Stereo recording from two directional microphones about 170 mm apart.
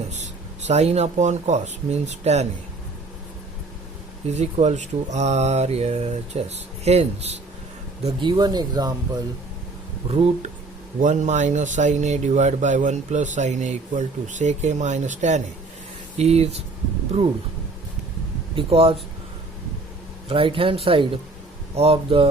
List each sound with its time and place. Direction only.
0.7 s speech: 40° right (ahead or behind)
4.4 s speech: 40° right (ahead or behind)
8.0 s speech: 25° right (ahead or behind)
10.1 s speech: 35° right (ahead or behind)
18.5 s speech: 35° right (ahead or behind)
20.2 s speech: 30° right (ahead or behind)